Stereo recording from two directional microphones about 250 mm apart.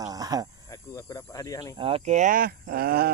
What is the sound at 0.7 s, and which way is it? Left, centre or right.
Speech, centre.